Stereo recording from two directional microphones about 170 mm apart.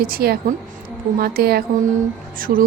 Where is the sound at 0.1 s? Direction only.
60° right (ahead or behind).